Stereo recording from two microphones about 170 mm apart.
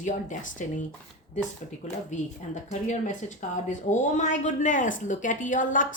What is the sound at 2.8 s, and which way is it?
A woman's voice, 45° left (ahead or behind).